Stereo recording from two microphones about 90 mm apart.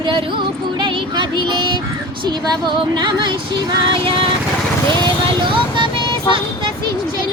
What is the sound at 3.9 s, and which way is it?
Vehicle, 70° right (ahead or behind).